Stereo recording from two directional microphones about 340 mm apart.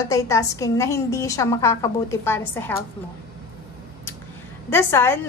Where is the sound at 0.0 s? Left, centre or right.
Centre.